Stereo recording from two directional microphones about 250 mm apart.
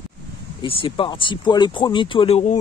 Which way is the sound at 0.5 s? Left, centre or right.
Left.